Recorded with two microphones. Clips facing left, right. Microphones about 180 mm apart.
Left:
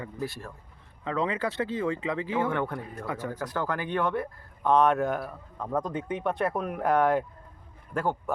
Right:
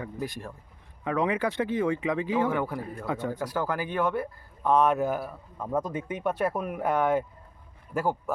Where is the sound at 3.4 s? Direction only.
10° right (ahead or behind).